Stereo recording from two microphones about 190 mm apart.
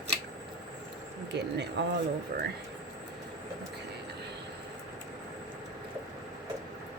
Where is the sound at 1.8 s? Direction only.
65° right (ahead or behind).